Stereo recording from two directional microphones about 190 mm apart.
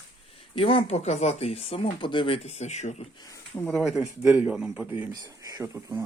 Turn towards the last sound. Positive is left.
turn(degrees=-20)  # may be behind; listen again after turning